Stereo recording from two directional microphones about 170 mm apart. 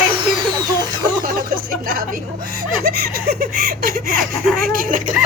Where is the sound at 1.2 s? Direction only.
55° right (ahead or behind).